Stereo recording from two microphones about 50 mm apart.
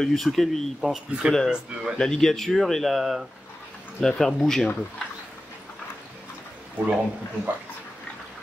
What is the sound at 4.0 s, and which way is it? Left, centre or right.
Speech, centre.